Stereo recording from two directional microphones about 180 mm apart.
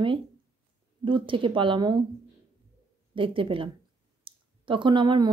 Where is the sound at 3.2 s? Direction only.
30° right (ahead or behind).